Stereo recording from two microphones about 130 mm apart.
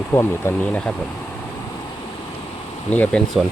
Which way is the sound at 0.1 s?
20° left (ahead or behind).